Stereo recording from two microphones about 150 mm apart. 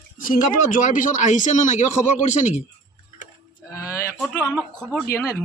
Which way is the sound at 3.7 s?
20° left (ahead or behind).